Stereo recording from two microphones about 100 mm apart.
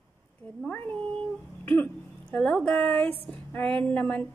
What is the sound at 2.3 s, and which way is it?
A woman's voice, 10° left (ahead or behind).